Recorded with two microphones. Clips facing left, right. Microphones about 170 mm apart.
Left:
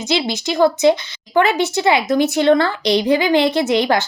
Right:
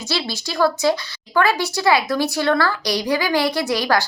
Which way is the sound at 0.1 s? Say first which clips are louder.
Left 6 dB; 20° left (ahead or behind).